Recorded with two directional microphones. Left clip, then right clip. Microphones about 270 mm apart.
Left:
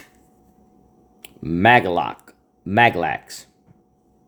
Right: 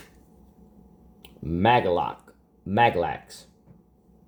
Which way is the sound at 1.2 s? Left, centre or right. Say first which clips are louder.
Left 7 dB; left.